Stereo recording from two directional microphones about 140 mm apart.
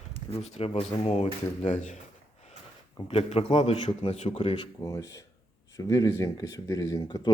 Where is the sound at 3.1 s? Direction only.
45° left (ahead or behind).